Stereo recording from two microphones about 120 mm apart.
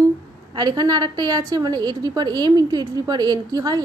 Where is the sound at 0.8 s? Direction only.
35° right (ahead or behind).